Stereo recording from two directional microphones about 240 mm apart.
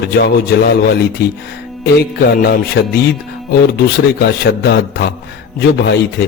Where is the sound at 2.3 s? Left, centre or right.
Left.